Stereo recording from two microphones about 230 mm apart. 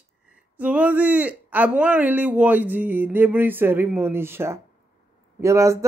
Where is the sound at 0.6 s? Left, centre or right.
Centre.